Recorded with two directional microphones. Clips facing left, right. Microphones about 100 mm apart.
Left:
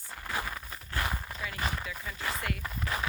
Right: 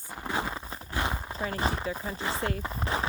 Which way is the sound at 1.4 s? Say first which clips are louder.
Right 7 dB; 35° right (ahead or behind).